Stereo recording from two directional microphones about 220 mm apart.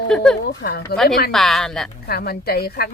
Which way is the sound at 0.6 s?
45° left (ahead or behind).